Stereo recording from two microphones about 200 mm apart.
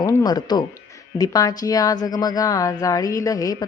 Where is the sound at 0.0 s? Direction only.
20° left (ahead or behind).